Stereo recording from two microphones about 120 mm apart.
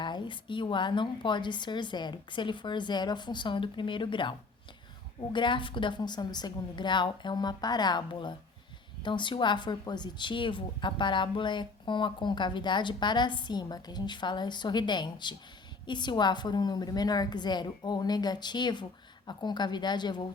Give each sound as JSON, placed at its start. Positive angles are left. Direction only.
{"t": 0.0, "sound": "a woman's voice", "side_deg": 40}